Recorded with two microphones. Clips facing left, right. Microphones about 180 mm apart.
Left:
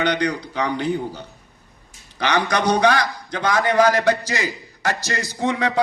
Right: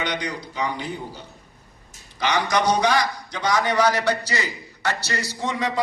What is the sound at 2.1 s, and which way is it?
A man's voice, 60° left (ahead or behind).